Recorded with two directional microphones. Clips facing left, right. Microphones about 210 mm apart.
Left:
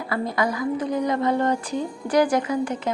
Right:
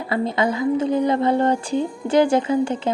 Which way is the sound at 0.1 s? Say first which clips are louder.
Right 4 dB; 25° right (ahead or behind).